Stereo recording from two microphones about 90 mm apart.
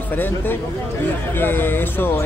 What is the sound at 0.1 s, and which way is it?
Speech, 20° left (ahead or behind).